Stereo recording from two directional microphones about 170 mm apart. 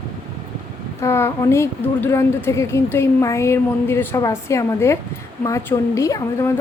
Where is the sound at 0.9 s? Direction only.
15° left (ahead or behind).